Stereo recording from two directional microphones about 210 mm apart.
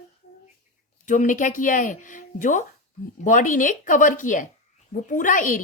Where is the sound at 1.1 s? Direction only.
35° left (ahead or behind).